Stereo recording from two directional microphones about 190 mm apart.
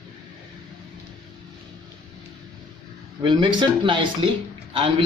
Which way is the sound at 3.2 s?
25° right (ahead or behind).